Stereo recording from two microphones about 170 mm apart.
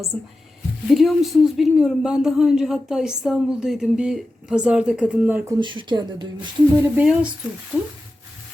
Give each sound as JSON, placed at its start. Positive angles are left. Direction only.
{"t": 0.1, "sound": "speech", "side_deg": 0}
{"t": 5.5, "sound": "speech", "side_deg": -25}
{"t": 6.9, "sound": "speech", "side_deg": -5}